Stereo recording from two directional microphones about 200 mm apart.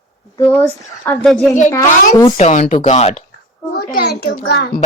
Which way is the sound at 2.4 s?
35° left (ahead or behind).